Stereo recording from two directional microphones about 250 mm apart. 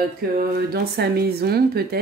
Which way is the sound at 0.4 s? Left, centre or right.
Right.